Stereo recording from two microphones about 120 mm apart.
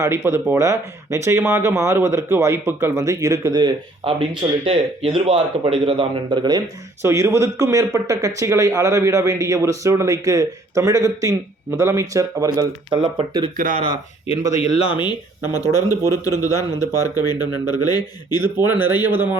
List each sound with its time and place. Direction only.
0.3 s a man's voice: 20° right (ahead or behind)
4.0 s speech: 50° right (ahead or behind)
7.0 s a man's voice: 25° right (ahead or behind)
12.9 s speech: 40° right (ahead or behind)
14.6 s speech: 55° left (ahead or behind)
15.4 s speech: 30° left (ahead or behind)
18.5 s speech: 15° right (ahead or behind)